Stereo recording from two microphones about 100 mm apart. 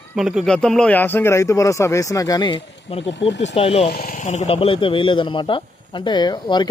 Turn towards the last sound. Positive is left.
turn(degrees=50)  # may be behind; listen again after turning